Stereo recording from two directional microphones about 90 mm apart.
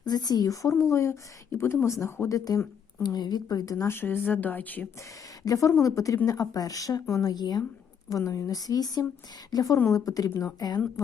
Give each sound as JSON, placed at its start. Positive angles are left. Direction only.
{"t": 0.0, "sound": "a woman's voice", "side_deg": 50}
{"t": 3.0, "sound": "a woman's voice", "side_deg": 50}
{"t": 3.8, "sound": "speech", "side_deg": 25}
{"t": 5.4, "sound": "a woman's voice", "side_deg": 40}